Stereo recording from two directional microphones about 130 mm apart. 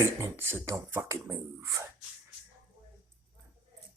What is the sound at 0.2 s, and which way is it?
Speech, 20° right (ahead or behind).